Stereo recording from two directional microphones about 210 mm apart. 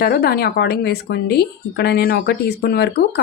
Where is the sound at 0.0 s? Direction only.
45° left (ahead or behind).